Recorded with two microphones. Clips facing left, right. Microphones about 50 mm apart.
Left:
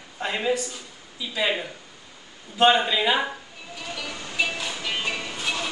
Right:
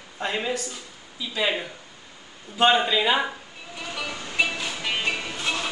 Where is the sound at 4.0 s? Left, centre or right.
Centre.